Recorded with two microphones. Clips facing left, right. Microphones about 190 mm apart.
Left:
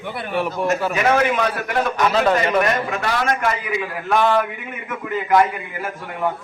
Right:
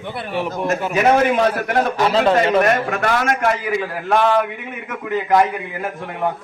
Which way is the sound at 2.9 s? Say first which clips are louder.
Right 2 dB; 50° right (ahead or behind).